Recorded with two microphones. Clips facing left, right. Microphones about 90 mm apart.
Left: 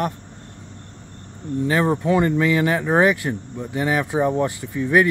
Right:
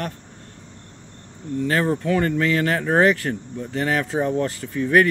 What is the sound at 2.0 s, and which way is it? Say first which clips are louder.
Speech: left 2 dB; 15° left (ahead or behind).